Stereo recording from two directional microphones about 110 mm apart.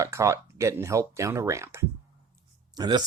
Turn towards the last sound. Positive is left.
turn(degrees=-40)  # may be behind; listen again after turning